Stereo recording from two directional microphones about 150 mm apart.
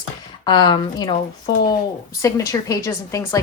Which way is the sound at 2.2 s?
20° left (ahead or behind).